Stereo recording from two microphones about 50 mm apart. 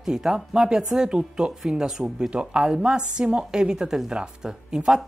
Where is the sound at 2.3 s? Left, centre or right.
Right.